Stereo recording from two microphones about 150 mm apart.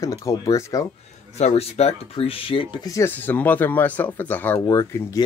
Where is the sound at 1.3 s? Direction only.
45° left (ahead or behind).